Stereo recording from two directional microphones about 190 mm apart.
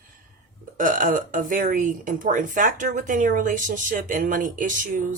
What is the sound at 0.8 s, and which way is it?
Speech, 45° right (ahead or behind).